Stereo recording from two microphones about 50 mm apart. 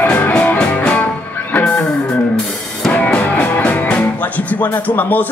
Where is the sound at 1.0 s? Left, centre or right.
Left.